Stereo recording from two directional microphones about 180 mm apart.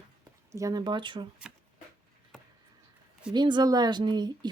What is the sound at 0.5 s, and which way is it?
Speech, 20° right (ahead or behind).